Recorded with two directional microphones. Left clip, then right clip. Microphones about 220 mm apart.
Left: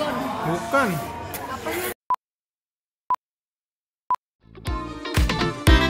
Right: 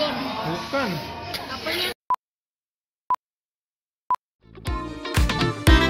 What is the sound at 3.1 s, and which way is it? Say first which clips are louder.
Busy signal: even; centre (ahead or behind).